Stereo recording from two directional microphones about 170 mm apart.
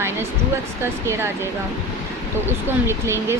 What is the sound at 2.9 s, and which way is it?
Speech, 15° right (ahead or behind).